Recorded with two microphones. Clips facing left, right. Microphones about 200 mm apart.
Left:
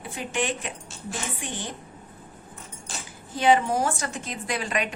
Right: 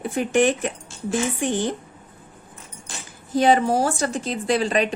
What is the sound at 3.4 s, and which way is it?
Speech, 40° right (ahead or behind).